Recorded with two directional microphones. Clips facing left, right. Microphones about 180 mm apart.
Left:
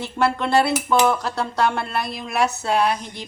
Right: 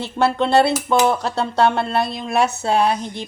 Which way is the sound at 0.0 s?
25° right (ahead or behind).